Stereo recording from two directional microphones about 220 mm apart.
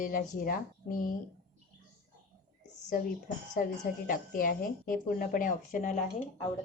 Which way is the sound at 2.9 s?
35° left (ahead or behind).